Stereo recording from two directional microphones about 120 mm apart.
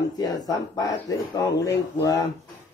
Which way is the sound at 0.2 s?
30° left (ahead or behind).